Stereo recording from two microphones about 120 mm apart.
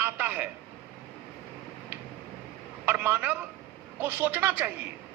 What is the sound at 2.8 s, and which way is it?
A man's voice, 15° right (ahead or behind).